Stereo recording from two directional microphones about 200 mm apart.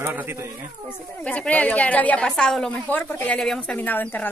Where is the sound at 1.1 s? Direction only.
5° left (ahead or behind).